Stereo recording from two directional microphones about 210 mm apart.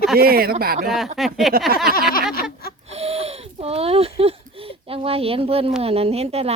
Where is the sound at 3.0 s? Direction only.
30° right (ahead or behind).